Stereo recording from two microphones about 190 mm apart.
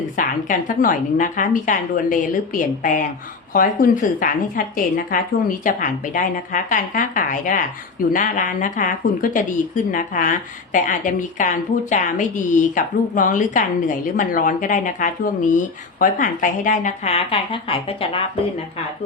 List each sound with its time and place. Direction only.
0.2 s speech: 45° left (ahead or behind); by 18.2 s 30° left (ahead or behind)